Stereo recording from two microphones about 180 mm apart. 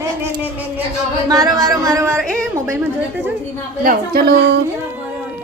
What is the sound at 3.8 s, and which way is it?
Speech, 60° right (ahead or behind).